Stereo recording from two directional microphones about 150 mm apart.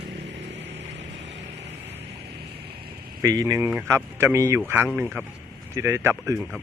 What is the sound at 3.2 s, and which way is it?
Speech, 25° right (ahead or behind).